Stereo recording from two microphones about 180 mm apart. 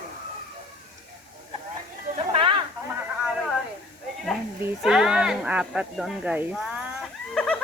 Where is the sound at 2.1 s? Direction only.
30° right (ahead or behind).